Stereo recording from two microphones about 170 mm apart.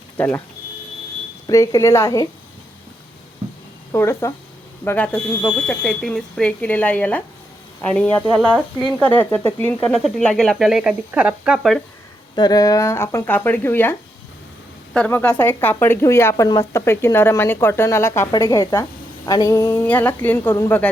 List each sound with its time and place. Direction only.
0.2 s a woman's voice: 15° left (ahead or behind)
1.5 s a woman's voice: 20° left (ahead or behind)
3.9 s a woman's voice: 15° left (ahead or behind); by 11.8 s centre (ahead or behind)
12.4 s a woman's voice: 20° left (ahead or behind)
14.9 s a woman's voice: 10° left (ahead or behind)